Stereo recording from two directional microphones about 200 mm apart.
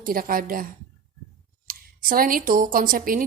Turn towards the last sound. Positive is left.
turn(degrees=-45)  # may be behind; listen again after turning